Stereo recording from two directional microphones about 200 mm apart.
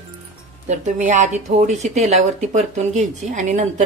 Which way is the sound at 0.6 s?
40° right (ahead or behind).